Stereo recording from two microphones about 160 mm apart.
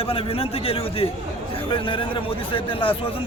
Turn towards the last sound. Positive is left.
turn(degrees=35)  # may be behind; listen again after turning